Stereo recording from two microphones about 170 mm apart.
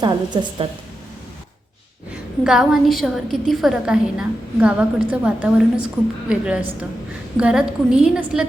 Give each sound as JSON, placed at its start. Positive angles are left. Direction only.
{"t": 0.6, "sound": "speech", "side_deg": -30}
{"t": 2.4, "sound": "a woman's voice", "side_deg": -5}